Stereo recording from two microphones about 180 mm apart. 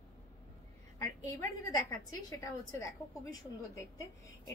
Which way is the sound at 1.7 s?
20° left (ahead or behind).